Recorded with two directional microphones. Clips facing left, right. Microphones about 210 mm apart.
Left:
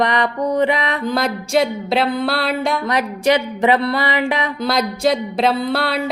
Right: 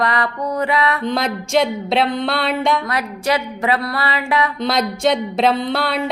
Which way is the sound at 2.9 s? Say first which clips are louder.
Left 4 dB; 20° left (ahead or behind).